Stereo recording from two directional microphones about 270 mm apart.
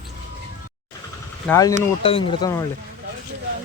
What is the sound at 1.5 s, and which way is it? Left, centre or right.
Speech, centre.